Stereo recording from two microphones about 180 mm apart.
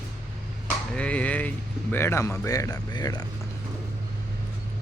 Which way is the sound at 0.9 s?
5° left (ahead or behind).